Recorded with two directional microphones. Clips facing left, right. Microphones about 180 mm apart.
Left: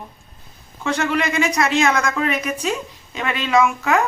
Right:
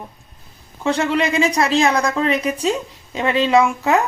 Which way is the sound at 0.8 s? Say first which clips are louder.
Right 3 dB; 30° right (ahead or behind).